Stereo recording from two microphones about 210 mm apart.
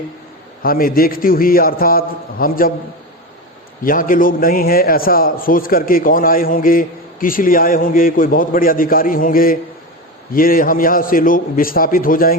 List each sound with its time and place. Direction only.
0.6 s a man's voice: 45° left (ahead or behind)
3.8 s a man's voice: 40° left (ahead or behind)